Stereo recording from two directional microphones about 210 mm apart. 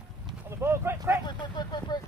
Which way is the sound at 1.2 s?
20° left (ahead or behind).